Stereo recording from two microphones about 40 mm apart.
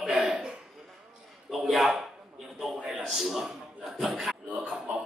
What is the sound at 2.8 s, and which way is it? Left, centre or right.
A man's voice, centre.